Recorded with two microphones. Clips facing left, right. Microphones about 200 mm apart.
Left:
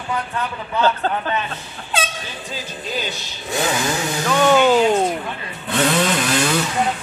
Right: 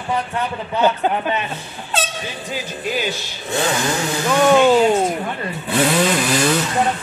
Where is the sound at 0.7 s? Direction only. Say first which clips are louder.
Right 2 dB; 15° right (ahead or behind).